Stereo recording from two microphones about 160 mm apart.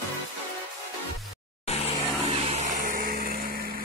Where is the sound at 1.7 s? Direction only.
40° left (ahead or behind).